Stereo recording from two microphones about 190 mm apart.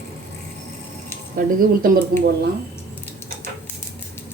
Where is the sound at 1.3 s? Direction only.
50° right (ahead or behind).